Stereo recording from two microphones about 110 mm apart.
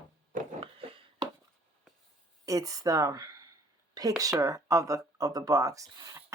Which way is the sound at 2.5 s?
30° right (ahead or behind).